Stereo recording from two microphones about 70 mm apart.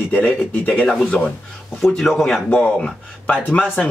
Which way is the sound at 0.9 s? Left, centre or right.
Centre.